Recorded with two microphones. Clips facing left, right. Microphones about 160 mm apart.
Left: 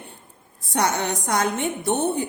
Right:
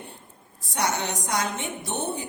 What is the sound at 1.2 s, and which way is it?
A woman's voice, 55° left (ahead or behind).